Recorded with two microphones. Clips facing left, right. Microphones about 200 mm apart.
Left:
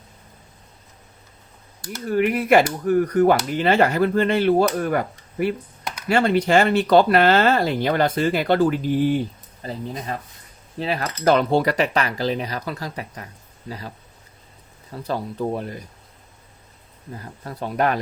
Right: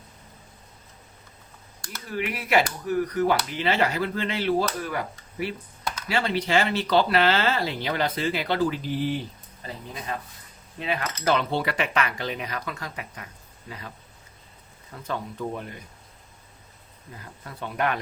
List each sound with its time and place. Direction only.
2.0 s speech: 50° left (ahead or behind)
9.6 s speech: 35° left (ahead or behind)
14.9 s speech: 35° left (ahead or behind)
17.2 s speech: 40° left (ahead or behind)